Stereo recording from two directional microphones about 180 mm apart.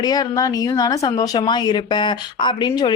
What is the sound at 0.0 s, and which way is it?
Speech, 20° left (ahead or behind).